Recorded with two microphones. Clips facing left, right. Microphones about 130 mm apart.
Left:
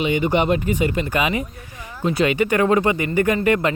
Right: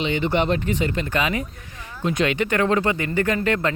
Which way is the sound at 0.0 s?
10° left (ahead or behind).